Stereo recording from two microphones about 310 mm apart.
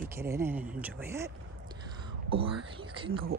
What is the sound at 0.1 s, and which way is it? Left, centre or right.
Speech, centre.